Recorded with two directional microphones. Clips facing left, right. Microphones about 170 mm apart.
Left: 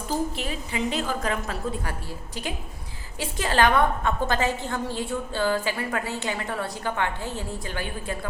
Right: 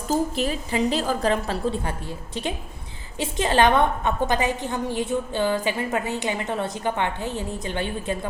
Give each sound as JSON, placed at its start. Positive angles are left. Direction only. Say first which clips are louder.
{"t": 0.1, "sound": "a woman's voice", "louder": "right 5 dB", "side_deg": -40}